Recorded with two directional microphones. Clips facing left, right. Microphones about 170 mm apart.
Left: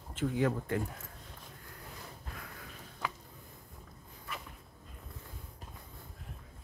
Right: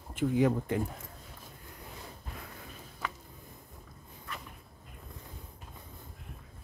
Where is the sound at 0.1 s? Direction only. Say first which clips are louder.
Right 4 dB; 15° right (ahead or behind).